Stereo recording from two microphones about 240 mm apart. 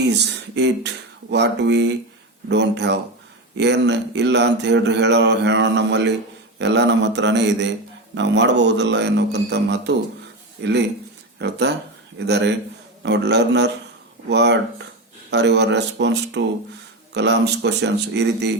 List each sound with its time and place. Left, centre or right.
0.0 s speech: right